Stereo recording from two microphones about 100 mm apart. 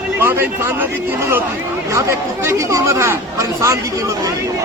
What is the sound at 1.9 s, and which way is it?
Speech, 30° right (ahead or behind).